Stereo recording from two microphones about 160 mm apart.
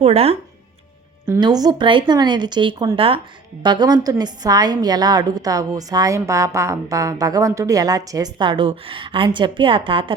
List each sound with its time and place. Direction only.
0.0 s speech: 40° right (ahead or behind)
1.3 s a woman's voice: 25° right (ahead or behind)